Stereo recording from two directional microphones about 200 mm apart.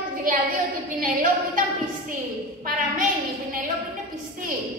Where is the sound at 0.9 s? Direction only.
40° right (ahead or behind).